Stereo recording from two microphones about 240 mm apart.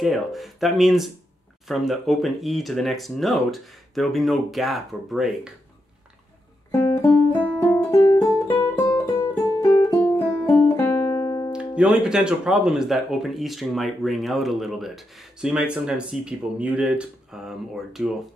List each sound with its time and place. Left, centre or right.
0.0 s speech: centre
6.7 s music: centre
11.5 s speech: centre